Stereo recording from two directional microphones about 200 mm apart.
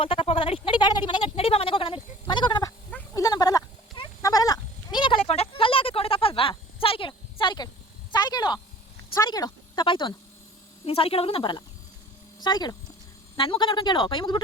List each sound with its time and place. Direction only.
0.0 s speech: 25° left (ahead or behind)
3.2 s goat: 20° left (ahead or behind)
8.1 s a sound: 20° left (ahead or behind)